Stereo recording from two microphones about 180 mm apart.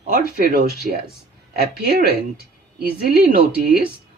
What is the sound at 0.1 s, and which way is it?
Speech, 55° right (ahead or behind).